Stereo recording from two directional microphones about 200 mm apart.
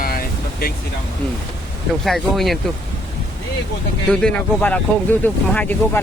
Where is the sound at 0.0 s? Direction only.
45° left (ahead or behind).